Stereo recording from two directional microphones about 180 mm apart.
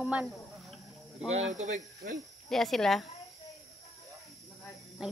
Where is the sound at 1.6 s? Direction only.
40° right (ahead or behind).